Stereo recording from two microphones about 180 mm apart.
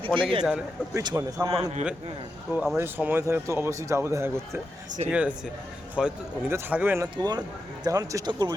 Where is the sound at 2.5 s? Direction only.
5° right (ahead or behind); by 8.5 s 20° right (ahead or behind).